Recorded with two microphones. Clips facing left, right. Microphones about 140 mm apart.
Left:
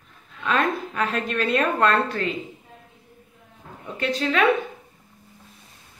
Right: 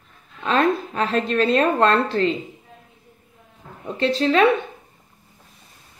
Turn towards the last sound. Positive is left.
turn(degrees=-30)  # may be behind; listen again after turning